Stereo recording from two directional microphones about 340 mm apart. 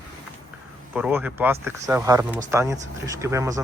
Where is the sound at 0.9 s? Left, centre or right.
Centre.